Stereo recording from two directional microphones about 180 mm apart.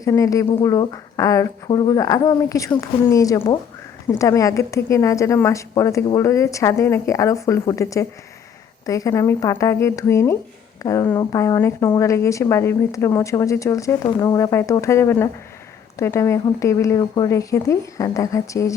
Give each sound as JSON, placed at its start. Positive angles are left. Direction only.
{"t": 0.0, "sound": "a woman's voice", "side_deg": 20}